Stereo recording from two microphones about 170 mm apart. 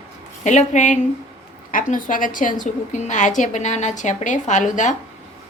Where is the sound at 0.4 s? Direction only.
45° left (ahead or behind).